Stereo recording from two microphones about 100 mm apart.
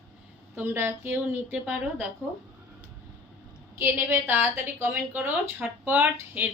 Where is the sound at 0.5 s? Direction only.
20° right (ahead or behind).